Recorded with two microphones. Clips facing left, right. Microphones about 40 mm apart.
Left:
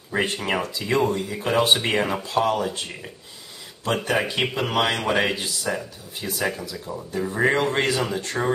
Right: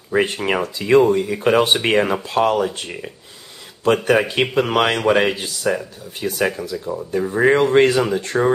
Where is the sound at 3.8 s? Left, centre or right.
Right.